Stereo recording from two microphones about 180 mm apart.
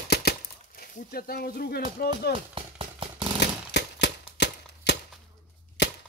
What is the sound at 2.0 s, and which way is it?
Speech, 60° left (ahead or behind).